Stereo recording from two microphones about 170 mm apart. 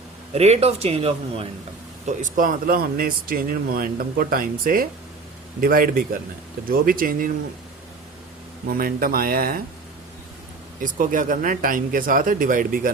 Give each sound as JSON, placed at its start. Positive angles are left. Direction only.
{"t": 0.3, "sound": "speech", "side_deg": -40}
{"t": 2.0, "sound": "speech", "side_deg": -50}
{"t": 8.6, "sound": "speech", "side_deg": -60}
{"t": 10.8, "sound": "speech", "side_deg": -50}